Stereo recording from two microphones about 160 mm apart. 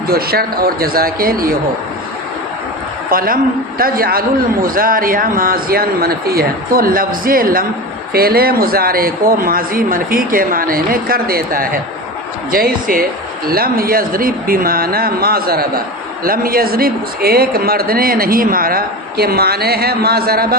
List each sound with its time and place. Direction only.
0.1 s a man's voice: 70° right (ahead or behind)
3.1 s a man's voice: 60° right (ahead or behind)